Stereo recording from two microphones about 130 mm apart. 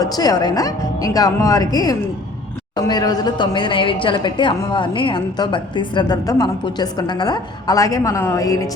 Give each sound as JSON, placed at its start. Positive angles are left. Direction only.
{"t": 0.0, "sound": "a woman's voice", "side_deg": 30}